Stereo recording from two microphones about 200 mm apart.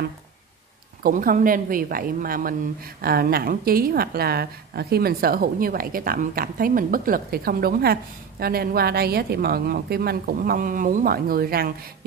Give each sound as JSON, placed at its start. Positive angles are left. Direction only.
{"t": 1.0, "sound": "a woman's voice", "side_deg": -45}